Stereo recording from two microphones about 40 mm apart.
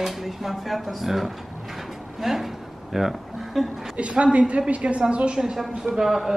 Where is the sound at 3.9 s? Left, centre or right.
Right.